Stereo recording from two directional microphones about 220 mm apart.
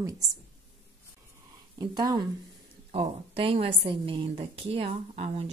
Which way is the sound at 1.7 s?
20° right (ahead or behind).